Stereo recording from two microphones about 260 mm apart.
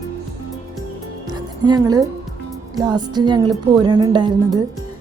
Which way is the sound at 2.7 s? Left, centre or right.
Centre.